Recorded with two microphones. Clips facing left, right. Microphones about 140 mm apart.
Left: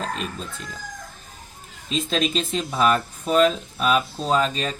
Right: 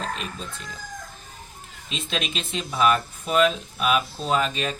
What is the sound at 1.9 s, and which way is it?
Speech, 40° left (ahead or behind).